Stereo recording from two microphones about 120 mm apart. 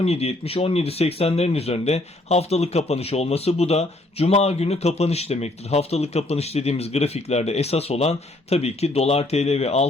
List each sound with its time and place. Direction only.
0.0 s speech: 60° left (ahead or behind)